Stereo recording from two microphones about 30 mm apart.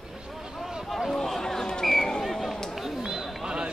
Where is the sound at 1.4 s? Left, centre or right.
Left.